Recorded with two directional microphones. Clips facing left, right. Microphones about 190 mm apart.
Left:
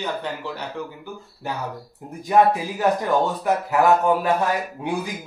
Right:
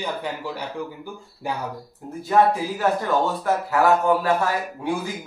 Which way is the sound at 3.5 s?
20° left (ahead or behind).